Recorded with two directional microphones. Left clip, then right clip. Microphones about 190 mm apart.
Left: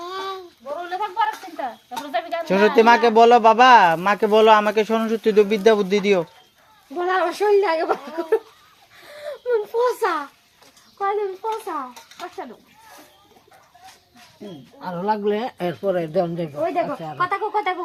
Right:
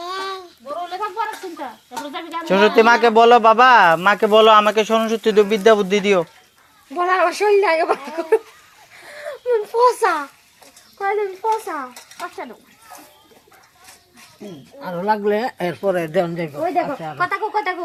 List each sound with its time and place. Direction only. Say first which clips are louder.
0.0 s a sound: right 3 dB; 10° right (ahead or behind)
2.4 s speech: right 3 dB; centre (ahead or behind)
9.0 s a sound: right 2 dB; 10° right (ahead or behind)
10.9 s speech: right 2 dB; centre (ahead or behind)
14.8 s speech: right 3 dB; 15° right (ahead or behind)
16.1 s speech: right 2 dB; 25° right (ahead or behind)
17.2 s speech: right 1 dB; centre (ahead or behind)